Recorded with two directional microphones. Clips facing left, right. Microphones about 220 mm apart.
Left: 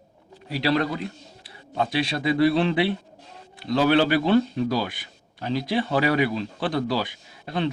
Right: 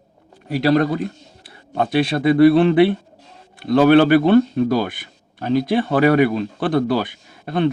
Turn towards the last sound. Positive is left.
turn(degrees=-55)  # may be behind; listen again after turning